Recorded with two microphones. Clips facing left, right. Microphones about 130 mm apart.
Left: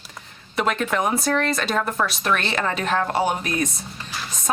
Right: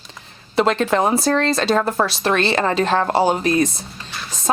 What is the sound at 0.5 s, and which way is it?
Speech, 30° right (ahead or behind).